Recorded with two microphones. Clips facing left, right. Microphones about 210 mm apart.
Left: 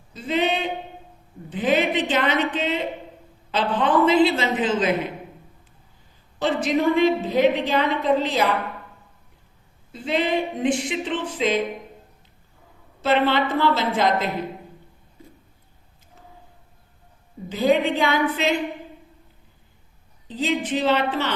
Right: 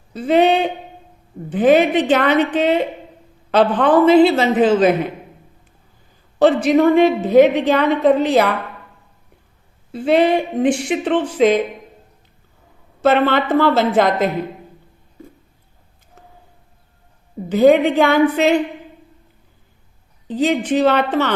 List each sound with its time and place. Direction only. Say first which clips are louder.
0.1 s a sound: right 9 dB; 65° right (ahead or behind)
1.5 s a woman's voice: right 8 dB; 55° right (ahead or behind)
6.4 s a woman's voice: right 8 dB; 65° right (ahead or behind)
9.9 s a woman's voice: right 8 dB; 60° right (ahead or behind)
13.0 s a woman's voice: right 5 dB; 50° right (ahead or behind)
17.5 s a woman's voice: right 8 dB; 60° right (ahead or behind)
20.4 s a woman's voice: right 7 dB; 55° right (ahead or behind)